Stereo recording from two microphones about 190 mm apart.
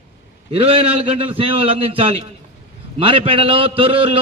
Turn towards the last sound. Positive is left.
turn(degrees=-30)  # may be behind; listen again after turning